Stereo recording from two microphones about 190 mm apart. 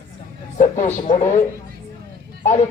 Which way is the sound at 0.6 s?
40° left (ahead or behind).